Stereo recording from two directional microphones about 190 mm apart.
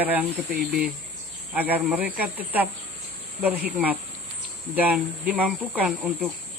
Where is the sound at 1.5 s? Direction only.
10° right (ahead or behind).